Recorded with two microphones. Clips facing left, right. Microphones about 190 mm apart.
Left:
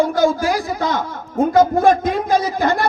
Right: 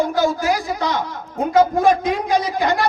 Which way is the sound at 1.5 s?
50° left (ahead or behind).